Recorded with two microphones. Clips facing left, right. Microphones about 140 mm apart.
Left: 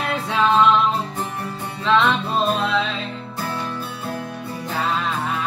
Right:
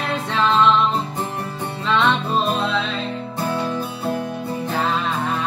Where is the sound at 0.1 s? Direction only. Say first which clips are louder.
Left 1 dB; 10° left (ahead or behind).